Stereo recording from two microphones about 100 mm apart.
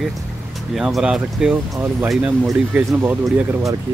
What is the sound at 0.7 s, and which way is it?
Speech, 5° right (ahead or behind).